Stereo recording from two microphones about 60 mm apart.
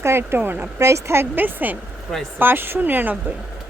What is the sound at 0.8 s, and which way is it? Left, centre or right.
Speech, right.